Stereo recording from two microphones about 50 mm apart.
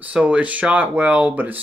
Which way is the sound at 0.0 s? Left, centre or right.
Right.